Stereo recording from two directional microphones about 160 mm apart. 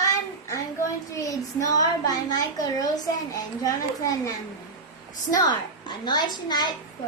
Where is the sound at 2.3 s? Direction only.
20° left (ahead or behind).